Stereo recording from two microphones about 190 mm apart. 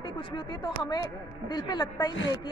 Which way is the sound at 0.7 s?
20° left (ahead or behind).